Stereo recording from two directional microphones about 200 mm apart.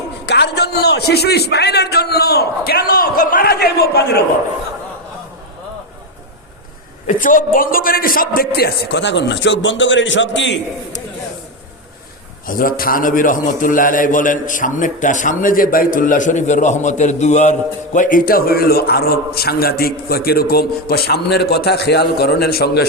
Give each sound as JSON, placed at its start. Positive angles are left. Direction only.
{"t": 0.3, "sound": "a man's voice", "side_deg": 55}
{"t": 7.1, "sound": "a man's voice", "side_deg": 40}
{"t": 12.5, "sound": "a man's voice", "side_deg": 45}